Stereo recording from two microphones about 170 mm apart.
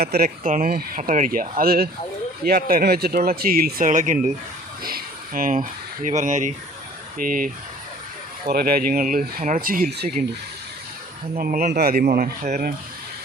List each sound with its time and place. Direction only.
0.0 s speech: 60° right (ahead or behind)
4.8 s speech: 60° right (ahead or behind)
11.3 s speech: 60° right (ahead or behind)